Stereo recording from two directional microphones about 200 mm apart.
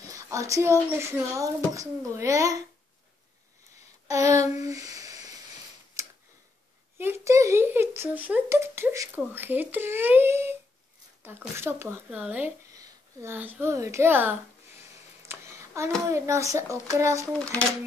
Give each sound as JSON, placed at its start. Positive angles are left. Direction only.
{"t": 0.0, "sound": "a child's voice", "side_deg": -15}
{"t": 4.1, "sound": "a child's voice", "side_deg": -15}
{"t": 4.6, "sound": "a sound", "side_deg": -15}
{"t": 7.0, "sound": "a child's voice", "side_deg": -15}
{"t": 15.2, "sound": "a sound", "side_deg": -15}
{"t": 16.1, "sound": "a child's voice", "side_deg": -15}